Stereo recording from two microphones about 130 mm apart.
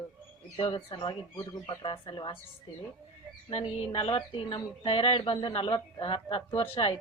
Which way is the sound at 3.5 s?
50° left (ahead or behind).